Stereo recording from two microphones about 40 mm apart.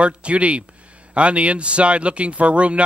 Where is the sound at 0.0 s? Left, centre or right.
Right.